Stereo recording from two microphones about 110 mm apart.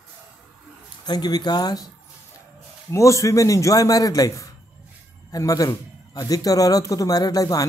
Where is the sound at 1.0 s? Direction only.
40° left (ahead or behind).